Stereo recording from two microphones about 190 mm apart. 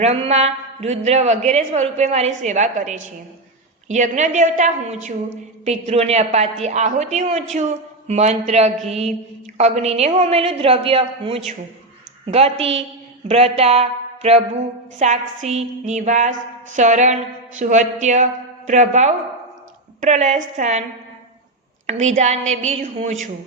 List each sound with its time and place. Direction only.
0.0 s a woman's voice: 35° right (ahead or behind)
21.8 s a woman's voice: 40° right (ahead or behind)